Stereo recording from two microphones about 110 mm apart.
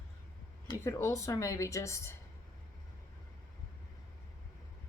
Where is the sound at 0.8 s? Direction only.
25° left (ahead or behind).